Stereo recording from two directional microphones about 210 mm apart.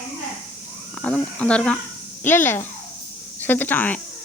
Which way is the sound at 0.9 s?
5° left (ahead or behind).